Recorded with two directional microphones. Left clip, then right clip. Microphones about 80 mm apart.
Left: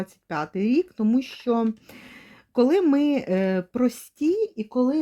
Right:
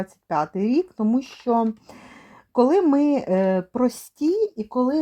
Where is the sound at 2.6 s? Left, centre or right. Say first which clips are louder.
Right 2 dB; right.